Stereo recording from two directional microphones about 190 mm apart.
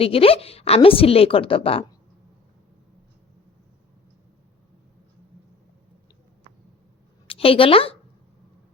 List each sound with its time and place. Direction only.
0.0 s a woman's voice: 30° left (ahead or behind)
7.3 s a woman's voice: 30° left (ahead or behind)